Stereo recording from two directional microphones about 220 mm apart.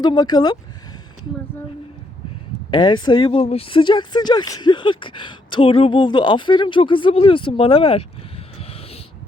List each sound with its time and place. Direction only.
0.0 s speech: 20° left (ahead or behind)
2.6 s speech: 20° left (ahead or behind)
8.5 s a sound: 30° left (ahead or behind)